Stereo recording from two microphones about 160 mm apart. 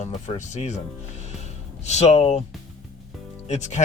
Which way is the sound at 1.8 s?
45° left (ahead or behind).